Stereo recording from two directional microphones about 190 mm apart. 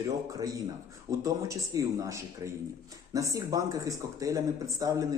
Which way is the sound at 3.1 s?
15° right (ahead or behind).